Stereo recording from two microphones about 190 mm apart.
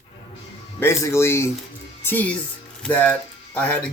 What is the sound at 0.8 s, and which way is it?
Speech, 15° left (ahead or behind).